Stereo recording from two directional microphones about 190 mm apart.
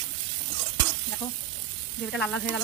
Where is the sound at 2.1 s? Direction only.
5° left (ahead or behind).